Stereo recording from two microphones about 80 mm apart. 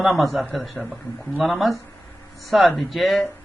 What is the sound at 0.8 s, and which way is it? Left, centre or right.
Speech, left.